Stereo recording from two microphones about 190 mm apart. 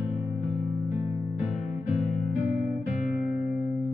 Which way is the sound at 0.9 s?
10° right (ahead or behind).